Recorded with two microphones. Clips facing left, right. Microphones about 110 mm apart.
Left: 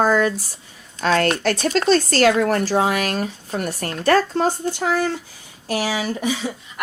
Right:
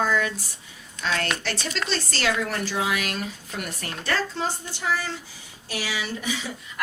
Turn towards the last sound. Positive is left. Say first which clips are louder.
# left 7 dB
turn(degrees=40)  # may be behind; listen again after turning